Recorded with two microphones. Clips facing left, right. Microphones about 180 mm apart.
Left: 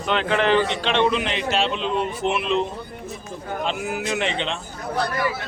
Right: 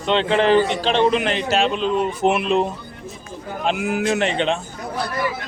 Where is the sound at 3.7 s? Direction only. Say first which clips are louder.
Right 8 dB; 55° right (ahead or behind).